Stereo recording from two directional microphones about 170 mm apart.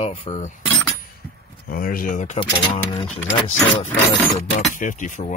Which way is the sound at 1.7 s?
55° left (ahead or behind).